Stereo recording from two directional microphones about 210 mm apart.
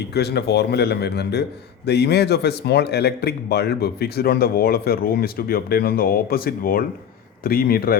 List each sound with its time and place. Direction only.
0.1 s a man's voice: 50° left (ahead or behind)